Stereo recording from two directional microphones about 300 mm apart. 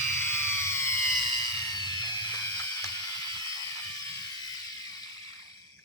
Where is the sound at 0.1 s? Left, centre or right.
Centre.